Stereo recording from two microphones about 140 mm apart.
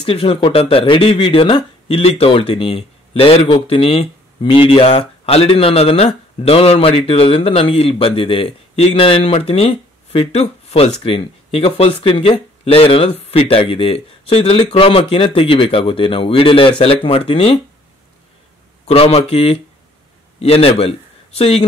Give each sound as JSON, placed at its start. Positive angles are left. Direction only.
{"t": 0.0, "sound": "speech", "side_deg": 40}
{"t": 18.9, "sound": "speech", "side_deg": 45}